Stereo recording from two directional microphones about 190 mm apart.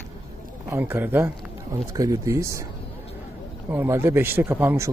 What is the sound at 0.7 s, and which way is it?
Speech, 10° right (ahead or behind).